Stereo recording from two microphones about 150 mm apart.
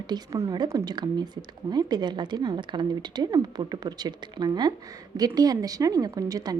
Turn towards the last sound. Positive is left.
turn(degrees=-25)  # may be behind; listen again after turning